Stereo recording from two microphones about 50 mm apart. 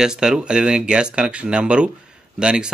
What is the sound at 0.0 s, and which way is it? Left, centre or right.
Speech, centre.